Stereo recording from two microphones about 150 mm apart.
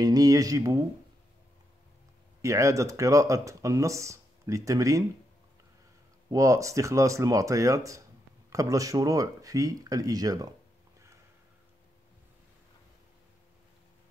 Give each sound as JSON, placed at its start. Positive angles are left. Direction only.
{"t": 0.0, "sound": "speech", "side_deg": -25}
{"t": 2.4, "sound": "speech", "side_deg": -20}
{"t": 6.3, "sound": "speech", "side_deg": -20}